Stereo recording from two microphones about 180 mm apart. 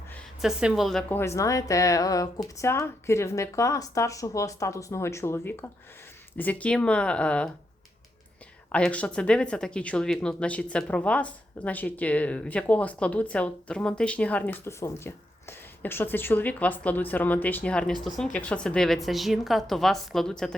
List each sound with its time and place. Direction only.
0.1 s a sound: 5° left (ahead or behind)
0.6 s a woman's voice: centre (ahead or behind)
1.2 s speech: 15° left (ahead or behind)
8.7 s a woman's voice: 5° left (ahead or behind)